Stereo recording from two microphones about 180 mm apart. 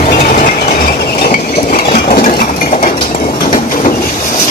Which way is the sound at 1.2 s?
50° left (ahead or behind).